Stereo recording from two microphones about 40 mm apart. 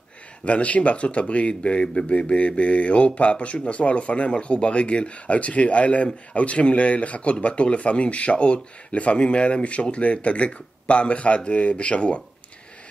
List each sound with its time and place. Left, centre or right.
0.5 s speech: left